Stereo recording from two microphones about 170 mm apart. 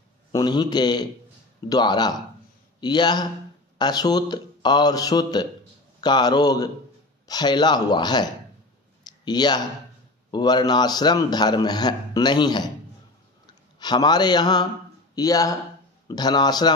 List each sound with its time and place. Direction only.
0.3 s a man's voice: 25° left (ahead or behind)
9.0 s clicking: 25° left (ahead or behind)
10.3 s a man's voice: 25° left (ahead or behind)
13.7 s a man's voice: 25° left (ahead or behind)